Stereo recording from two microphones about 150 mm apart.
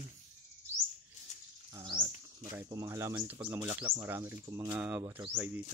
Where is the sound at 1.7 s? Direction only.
25° right (ahead or behind).